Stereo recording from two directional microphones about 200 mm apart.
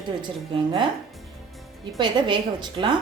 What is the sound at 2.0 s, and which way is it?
Speech, 25° right (ahead or behind).